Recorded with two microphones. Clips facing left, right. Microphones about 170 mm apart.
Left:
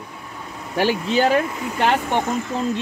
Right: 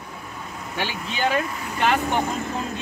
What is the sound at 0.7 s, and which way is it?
Speech, 40° left (ahead or behind).